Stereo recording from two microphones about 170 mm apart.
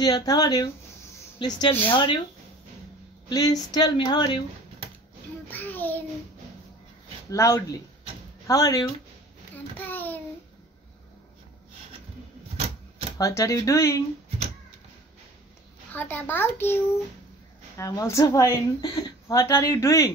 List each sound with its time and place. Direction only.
0.0 s a woman's voice: 25° left (ahead or behind)
3.3 s a woman's voice: 25° left (ahead or behind)
5.5 s child singing: 10° left (ahead or behind)
7.2 s a woman's voice: 20° left (ahead or behind)
9.8 s a sound: 10° left (ahead or behind)
13.2 s a child's voice: 20° left (ahead or behind)
15.9 s a child's voice: 10° left (ahead or behind)
17.7 s a woman's voice: 20° left (ahead or behind)